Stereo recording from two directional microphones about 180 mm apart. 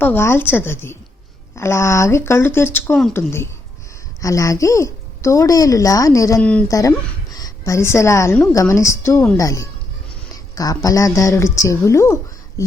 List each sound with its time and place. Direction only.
0.0 s a woman's voice: 10° left (ahead or behind)
6.4 s a woman's voice: 5° left (ahead or behind)
6.7 s a woman's voice: 20° left (ahead or behind)
10.3 s a sound: 20° left (ahead or behind)
10.8 s a woman's voice: 20° left (ahead or behind)